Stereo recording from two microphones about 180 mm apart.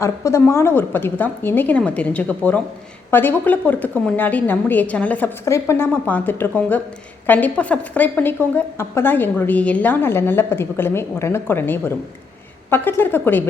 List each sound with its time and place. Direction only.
0.0 s a woman's voice: 15° left (ahead or behind)